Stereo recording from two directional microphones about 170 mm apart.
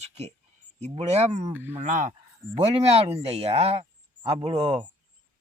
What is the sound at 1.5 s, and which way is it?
Speech, 10° right (ahead or behind).